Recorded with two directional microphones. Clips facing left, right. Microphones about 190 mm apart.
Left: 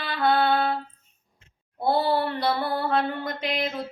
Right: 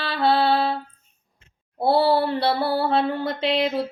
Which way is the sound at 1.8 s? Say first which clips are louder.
Right 4 dB; 30° right (ahead or behind).